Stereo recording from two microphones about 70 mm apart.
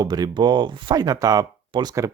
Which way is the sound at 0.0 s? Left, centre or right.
Right.